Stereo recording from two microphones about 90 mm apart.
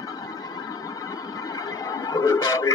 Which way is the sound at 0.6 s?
40° left (ahead or behind).